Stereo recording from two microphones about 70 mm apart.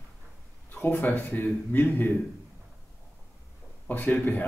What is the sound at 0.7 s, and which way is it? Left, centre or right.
A man's voice, left.